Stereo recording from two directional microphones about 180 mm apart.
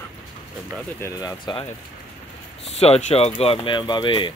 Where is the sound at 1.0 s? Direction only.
20° left (ahead or behind).